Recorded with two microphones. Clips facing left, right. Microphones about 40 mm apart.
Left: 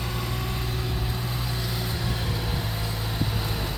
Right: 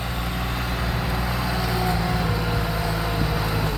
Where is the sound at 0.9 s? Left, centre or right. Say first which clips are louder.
Right 5 dB; right.